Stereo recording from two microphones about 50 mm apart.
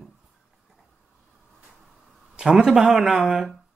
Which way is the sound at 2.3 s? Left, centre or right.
Centre.